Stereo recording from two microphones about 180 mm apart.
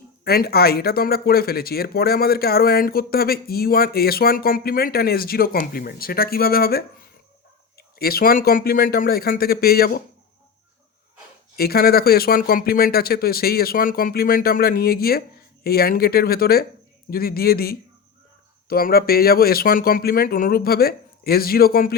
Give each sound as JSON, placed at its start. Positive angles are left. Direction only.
{"t": 0.3, "sound": "speech", "side_deg": 60}
{"t": 11.5, "sound": "speech", "side_deg": 60}